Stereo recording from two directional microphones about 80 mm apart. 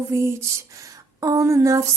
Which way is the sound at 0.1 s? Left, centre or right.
Right.